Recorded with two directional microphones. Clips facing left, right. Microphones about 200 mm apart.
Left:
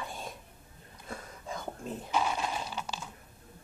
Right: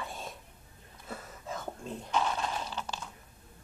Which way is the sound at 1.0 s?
5° right (ahead or behind).